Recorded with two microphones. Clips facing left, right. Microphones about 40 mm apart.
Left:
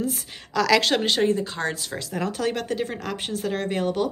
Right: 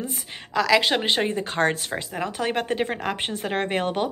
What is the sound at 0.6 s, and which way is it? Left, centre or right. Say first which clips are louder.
Speech: even; centre.